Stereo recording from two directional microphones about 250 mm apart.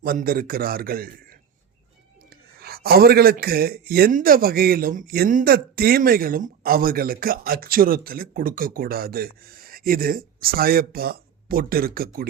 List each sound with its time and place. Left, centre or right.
0.0 s a man's voice: right
2.6 s a man's voice: right